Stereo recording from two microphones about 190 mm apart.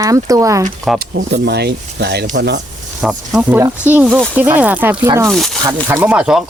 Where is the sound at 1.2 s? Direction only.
60° right (ahead or behind).